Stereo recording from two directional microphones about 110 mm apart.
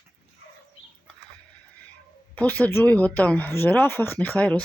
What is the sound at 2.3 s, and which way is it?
Speech, 15° left (ahead or behind).